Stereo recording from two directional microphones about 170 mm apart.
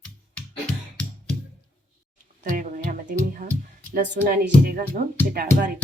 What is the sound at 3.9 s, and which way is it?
Speech, 50° right (ahead or behind).